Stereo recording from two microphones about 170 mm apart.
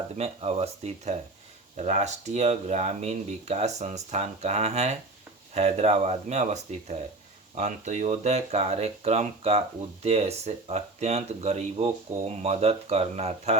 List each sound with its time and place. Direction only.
0.2 s speech: 40° right (ahead or behind)